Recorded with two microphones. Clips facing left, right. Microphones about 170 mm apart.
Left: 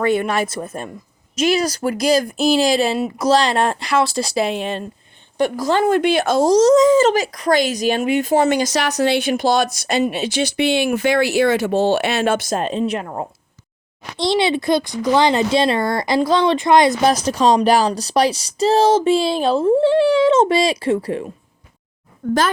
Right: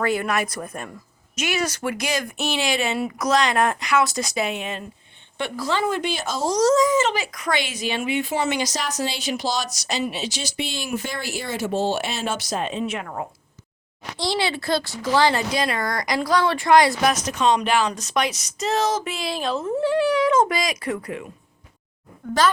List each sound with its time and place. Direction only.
0.0 s speech: 25° left (ahead or behind)
5.4 s speech: 45° left (ahead or behind)
6.5 s speech: 20° left (ahead or behind)
7.0 s speech: 40° left (ahead or behind)
8.7 s speech: 65° left (ahead or behind); by 13.2 s 30° left (ahead or behind)
14.2 s speech: 20° left (ahead or behind)
17.1 s speech: 35° left (ahead or behind)